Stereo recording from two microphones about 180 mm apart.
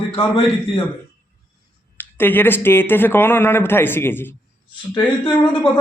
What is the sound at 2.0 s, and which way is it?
Speech, 10° left (ahead or behind).